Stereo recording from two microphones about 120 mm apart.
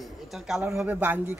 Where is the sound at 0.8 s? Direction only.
15° right (ahead or behind).